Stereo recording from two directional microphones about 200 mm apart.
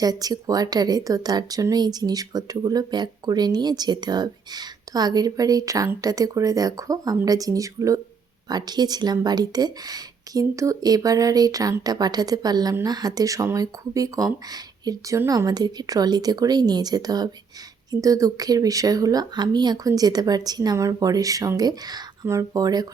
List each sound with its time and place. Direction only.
0.0 s speech: 20° right (ahead or behind)